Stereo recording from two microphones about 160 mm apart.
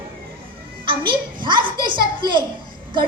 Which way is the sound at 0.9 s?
30° right (ahead or behind).